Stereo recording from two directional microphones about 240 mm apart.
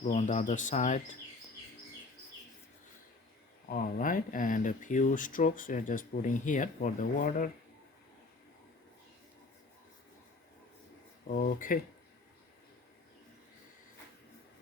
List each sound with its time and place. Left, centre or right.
0.0 s speech: left
3.7 s speech: left
11.3 s speech: left